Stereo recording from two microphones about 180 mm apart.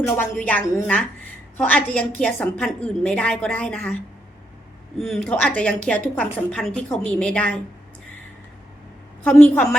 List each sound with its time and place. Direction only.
0.2 s a woman's voice: 10° left (ahead or behind)
9.2 s a woman's voice: 10° left (ahead or behind)